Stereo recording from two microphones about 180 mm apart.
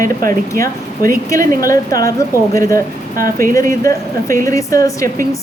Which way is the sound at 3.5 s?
15° left (ahead or behind).